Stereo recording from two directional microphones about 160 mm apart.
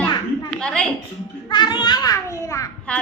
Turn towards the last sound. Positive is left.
turn(degrees=5)  # may be behind; listen again after turning